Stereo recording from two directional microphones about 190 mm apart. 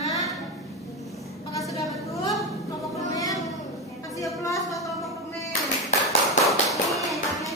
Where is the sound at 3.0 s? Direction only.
20° left (ahead or behind).